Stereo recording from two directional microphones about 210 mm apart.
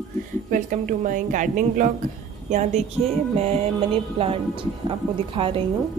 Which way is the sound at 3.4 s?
30° right (ahead or behind).